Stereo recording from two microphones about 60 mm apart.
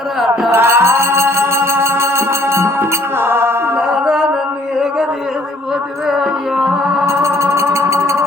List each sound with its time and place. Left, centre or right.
0.5 s music: right
3.9 s music: centre
6.1 s music: centre
7.0 s music: right